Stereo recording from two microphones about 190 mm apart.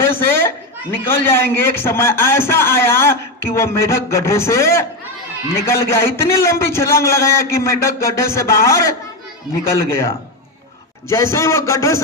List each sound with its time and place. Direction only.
0.0 s a man's voice: 10° left (ahead or behind)
11.1 s a man's voice: 15° left (ahead or behind)